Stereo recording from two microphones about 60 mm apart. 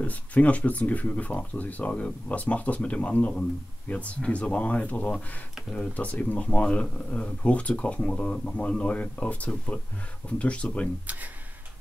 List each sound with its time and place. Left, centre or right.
0.0 s speech: left